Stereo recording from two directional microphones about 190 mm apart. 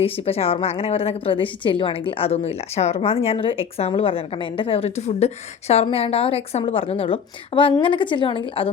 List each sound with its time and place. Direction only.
0.0 s a woman's voice: 30° left (ahead or behind)